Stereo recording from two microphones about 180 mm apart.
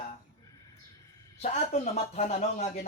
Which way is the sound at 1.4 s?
35° left (ahead or behind).